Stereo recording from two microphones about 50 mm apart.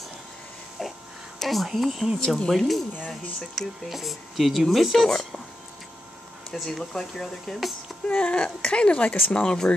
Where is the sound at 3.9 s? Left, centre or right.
Centre.